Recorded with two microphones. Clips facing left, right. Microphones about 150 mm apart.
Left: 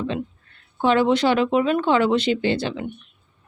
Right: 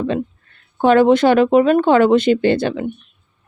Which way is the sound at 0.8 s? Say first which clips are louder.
Right 6 dB; 50° right (ahead or behind).